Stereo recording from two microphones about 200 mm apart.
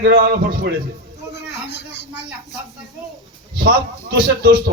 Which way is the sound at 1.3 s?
60° left (ahead or behind).